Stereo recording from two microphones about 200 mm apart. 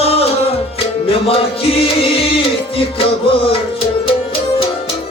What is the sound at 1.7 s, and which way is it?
Music, 30° left (ahead or behind).